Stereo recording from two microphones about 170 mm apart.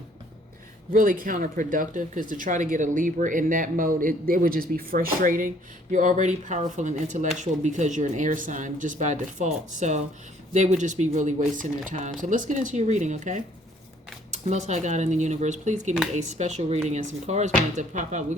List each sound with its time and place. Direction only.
0.9 s speech: 55° right (ahead or behind)
14.4 s speech: 45° right (ahead or behind)